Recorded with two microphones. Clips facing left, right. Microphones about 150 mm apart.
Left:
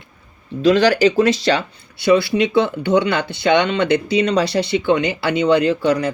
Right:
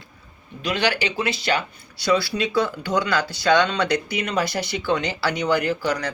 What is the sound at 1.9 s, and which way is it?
Speech, 20° left (ahead or behind).